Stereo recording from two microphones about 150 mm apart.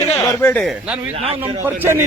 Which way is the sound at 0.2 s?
10° left (ahead or behind).